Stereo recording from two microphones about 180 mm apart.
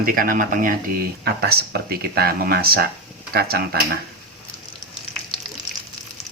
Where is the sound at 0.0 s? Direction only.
50° right (ahead or behind).